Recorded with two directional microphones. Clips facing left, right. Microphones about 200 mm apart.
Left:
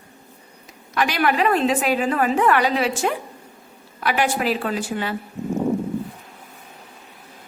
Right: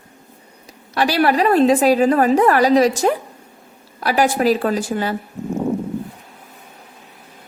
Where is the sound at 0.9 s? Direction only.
35° right (ahead or behind).